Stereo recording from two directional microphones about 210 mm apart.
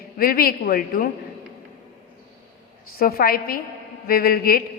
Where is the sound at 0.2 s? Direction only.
45° left (ahead or behind).